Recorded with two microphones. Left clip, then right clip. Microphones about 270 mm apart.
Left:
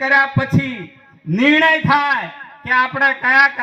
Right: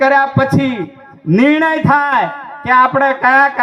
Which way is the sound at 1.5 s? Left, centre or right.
Left.